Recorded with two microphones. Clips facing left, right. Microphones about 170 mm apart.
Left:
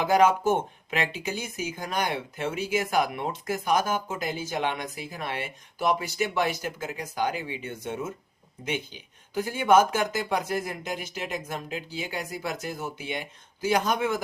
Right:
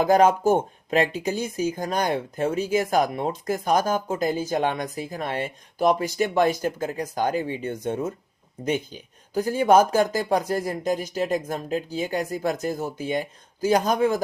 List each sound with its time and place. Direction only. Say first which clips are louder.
0.0 s speech: right 3 dB; 40° right (ahead or behind)